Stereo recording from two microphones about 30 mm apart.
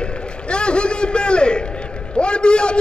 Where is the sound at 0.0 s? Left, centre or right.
Left.